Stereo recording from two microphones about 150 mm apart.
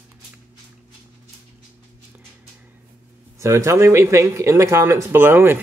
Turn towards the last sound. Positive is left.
turn(degrees=-15)  # may be behind; listen again after turning